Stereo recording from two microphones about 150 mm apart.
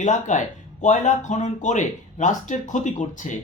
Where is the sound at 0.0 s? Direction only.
55° left (ahead or behind).